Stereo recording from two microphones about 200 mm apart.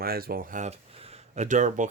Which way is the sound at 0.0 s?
50° right (ahead or behind).